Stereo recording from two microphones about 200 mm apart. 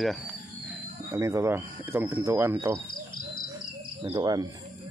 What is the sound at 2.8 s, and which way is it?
Cricket, 45° left (ahead or behind).